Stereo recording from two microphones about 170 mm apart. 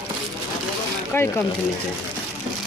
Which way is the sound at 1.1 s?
15° left (ahead or behind).